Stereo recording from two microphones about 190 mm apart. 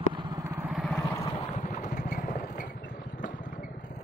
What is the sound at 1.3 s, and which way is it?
Vehicle, 40° left (ahead or behind).